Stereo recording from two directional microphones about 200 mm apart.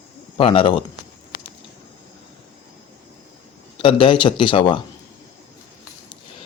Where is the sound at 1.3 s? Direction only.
20° left (ahead or behind).